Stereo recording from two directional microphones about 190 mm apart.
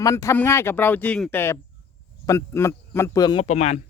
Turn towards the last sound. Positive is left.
turn(degrees=35)  # may be behind; listen again after turning